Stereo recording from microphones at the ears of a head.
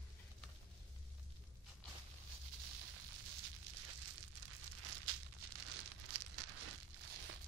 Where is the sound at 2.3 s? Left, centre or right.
Right.